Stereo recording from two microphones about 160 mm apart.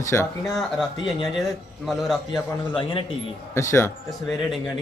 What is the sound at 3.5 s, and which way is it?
Speech, 15° left (ahead or behind).